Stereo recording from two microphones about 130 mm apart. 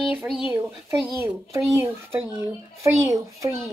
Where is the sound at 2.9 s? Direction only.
25° right (ahead or behind).